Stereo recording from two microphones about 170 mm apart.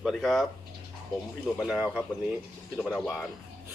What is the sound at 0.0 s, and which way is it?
Speech, centre (ahead or behind).